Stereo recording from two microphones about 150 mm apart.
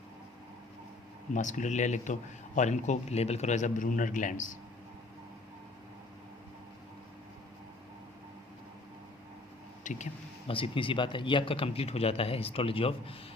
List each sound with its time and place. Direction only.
1.3 s a man's voice: 55° left (ahead or behind)
9.8 s speech: 55° left (ahead or behind)
10.4 s speech: 35° left (ahead or behind)